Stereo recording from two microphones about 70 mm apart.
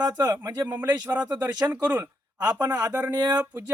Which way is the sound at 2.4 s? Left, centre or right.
Right.